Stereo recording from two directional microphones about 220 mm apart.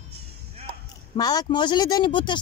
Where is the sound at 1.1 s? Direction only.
15° left (ahead or behind).